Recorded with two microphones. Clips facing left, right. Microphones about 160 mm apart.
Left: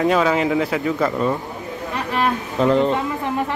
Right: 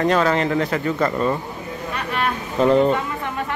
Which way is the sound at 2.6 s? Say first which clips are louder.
Right 1 dB; 5° right (ahead or behind).